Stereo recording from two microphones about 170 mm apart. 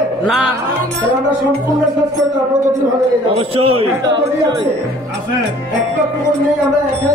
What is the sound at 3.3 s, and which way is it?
Speech, 35° right (ahead or behind).